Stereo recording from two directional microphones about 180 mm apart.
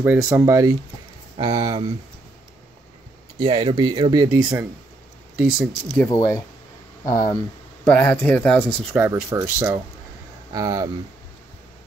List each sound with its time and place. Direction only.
0.0 s speech: 10° right (ahead or behind)
1.3 s speech: 30° right (ahead or behind)
3.3 s speech: 30° right (ahead or behind)
4.4 s speech: 5° right (ahead or behind)
6.0 s speech: 20° left (ahead or behind)
8.9 s speech: 15° right (ahead or behind)